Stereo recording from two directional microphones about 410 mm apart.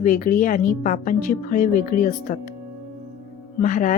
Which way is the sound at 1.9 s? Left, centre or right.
Centre.